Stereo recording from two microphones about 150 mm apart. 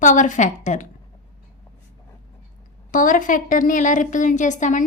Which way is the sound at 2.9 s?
60° left (ahead or behind).